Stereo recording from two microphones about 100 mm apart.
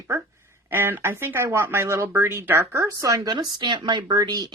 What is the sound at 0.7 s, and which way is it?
Speech, 20° right (ahead or behind).